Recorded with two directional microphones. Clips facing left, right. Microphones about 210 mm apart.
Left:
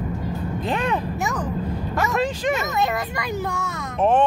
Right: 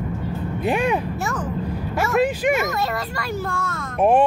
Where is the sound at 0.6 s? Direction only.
10° right (ahead or behind).